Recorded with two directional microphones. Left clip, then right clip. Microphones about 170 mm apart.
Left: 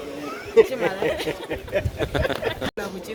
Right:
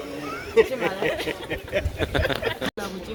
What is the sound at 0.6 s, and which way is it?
Speech, 50° left (ahead or behind).